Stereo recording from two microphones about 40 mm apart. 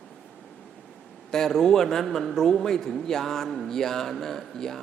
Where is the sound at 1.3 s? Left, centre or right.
Centre.